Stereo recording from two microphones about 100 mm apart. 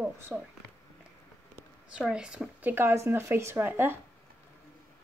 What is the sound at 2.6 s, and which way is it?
Speech, 25° right (ahead or behind).